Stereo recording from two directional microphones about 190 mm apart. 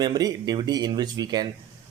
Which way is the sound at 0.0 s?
20° right (ahead or behind).